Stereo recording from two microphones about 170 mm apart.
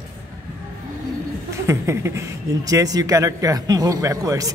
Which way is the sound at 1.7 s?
15° right (ahead or behind).